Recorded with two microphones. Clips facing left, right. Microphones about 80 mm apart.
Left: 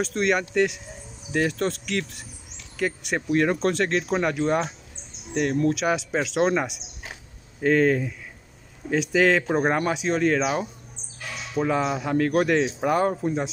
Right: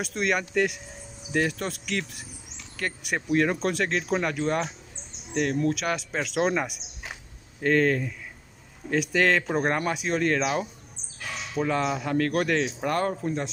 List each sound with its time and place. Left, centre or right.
0.0 s speech: centre